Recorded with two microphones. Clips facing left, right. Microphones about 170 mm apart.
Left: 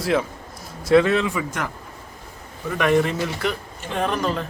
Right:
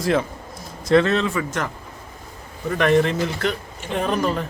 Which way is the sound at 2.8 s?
10° left (ahead or behind).